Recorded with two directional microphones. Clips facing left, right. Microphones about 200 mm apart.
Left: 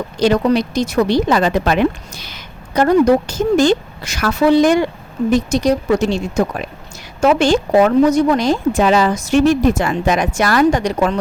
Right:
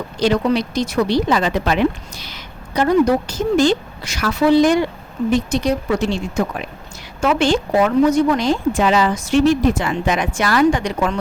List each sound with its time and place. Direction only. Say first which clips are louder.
0.2 s a woman's voice: left 3 dB; 45° left (ahead or behind)